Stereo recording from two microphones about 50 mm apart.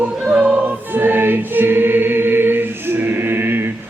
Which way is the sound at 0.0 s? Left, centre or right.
Right.